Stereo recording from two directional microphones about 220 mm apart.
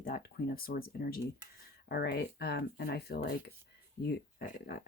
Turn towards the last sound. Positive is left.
turn(degrees=45)  # may be behind; listen again after turning